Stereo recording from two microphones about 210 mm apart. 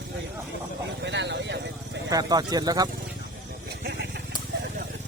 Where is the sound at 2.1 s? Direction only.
20° right (ahead or behind).